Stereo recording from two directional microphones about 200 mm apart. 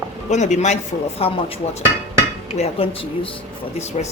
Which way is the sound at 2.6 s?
30° left (ahead or behind).